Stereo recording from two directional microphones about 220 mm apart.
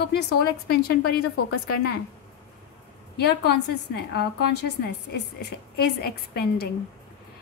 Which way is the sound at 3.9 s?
50° left (ahead or behind).